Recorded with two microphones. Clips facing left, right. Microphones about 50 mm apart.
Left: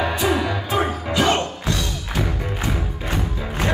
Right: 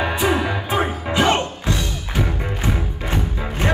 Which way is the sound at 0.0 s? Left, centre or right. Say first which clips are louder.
Right 1 dB; right.